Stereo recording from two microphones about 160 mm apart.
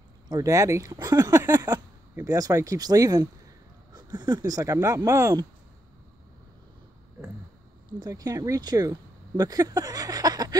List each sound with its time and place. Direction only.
0.3 s speech: 20° right (ahead or behind)
8.0 s speech: 25° right (ahead or behind)